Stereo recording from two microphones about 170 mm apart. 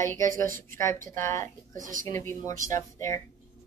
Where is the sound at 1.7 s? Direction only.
50° right (ahead or behind).